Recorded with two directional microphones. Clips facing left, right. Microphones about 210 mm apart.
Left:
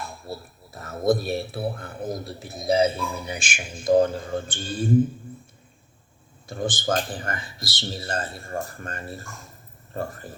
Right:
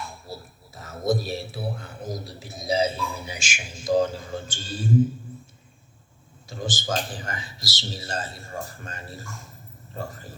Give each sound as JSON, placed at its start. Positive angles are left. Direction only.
{"t": 0.3, "sound": "a man's voice", "side_deg": 55}
{"t": 6.5, "sound": "a man's voice", "side_deg": 55}